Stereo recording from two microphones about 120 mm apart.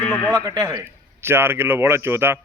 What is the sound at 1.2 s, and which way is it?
A man's voice, 20° right (ahead or behind).